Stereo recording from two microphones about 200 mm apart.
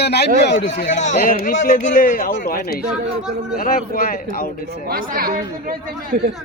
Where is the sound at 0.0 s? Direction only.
55° left (ahead or behind).